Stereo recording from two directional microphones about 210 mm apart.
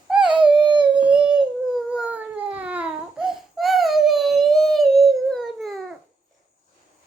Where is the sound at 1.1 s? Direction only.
5° right (ahead or behind).